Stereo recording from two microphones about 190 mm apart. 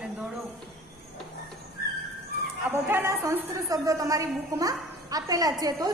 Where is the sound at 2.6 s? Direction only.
10° right (ahead or behind).